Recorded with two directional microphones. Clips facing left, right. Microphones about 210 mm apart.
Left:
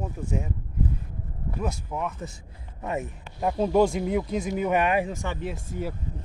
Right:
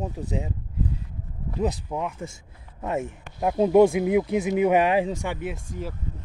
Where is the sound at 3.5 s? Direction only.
20° right (ahead or behind).